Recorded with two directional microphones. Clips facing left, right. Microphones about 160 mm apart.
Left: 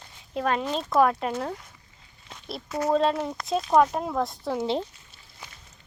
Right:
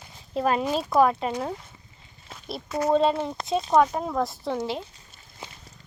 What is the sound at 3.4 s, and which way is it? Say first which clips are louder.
Speech: right 1 dB; 25° right (ahead or behind).